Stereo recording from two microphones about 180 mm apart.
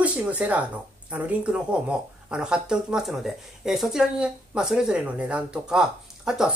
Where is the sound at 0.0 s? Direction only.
5° right (ahead or behind).